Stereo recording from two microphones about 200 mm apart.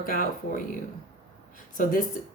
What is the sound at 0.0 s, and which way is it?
Speech, 45° left (ahead or behind).